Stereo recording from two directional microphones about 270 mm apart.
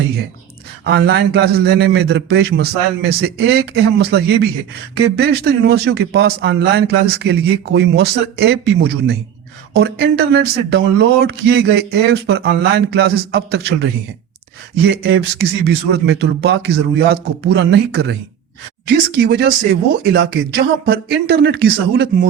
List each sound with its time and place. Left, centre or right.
0.9 s speech: right